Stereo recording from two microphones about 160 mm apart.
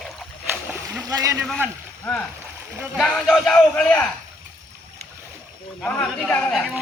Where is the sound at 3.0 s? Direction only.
5° left (ahead or behind).